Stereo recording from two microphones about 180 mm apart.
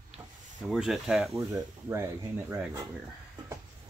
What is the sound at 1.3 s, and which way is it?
Speech, 15° right (ahead or behind).